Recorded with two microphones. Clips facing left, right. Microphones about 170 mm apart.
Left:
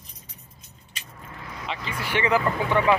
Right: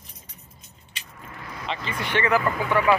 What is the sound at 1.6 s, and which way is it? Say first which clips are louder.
Speech: right 2 dB; 10° left (ahead or behind).